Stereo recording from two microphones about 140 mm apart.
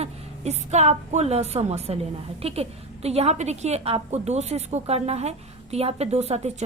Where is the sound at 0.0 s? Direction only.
50° right (ahead or behind).